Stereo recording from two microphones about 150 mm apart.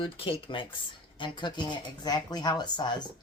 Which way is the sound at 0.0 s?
35° left (ahead or behind).